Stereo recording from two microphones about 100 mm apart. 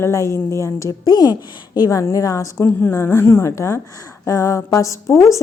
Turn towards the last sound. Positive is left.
turn(degrees=30)  # may be behind; listen again after turning